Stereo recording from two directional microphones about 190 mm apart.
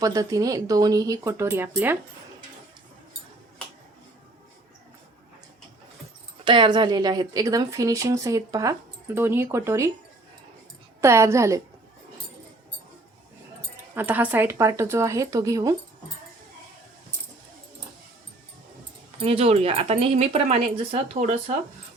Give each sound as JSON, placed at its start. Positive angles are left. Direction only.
{"t": 0.0, "sound": "speech", "side_deg": -20}
{"t": 6.4, "sound": "speech", "side_deg": -25}
{"t": 11.0, "sound": "speech", "side_deg": -15}
{"t": 13.9, "sound": "speech", "side_deg": -10}
{"t": 19.2, "sound": "speech", "side_deg": -30}